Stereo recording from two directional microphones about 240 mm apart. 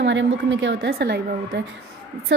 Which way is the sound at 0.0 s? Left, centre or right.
Right.